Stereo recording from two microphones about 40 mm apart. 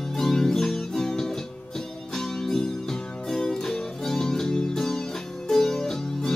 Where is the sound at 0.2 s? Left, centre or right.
Centre.